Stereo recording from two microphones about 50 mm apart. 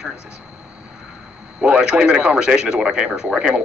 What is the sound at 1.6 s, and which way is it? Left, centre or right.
Speech, centre.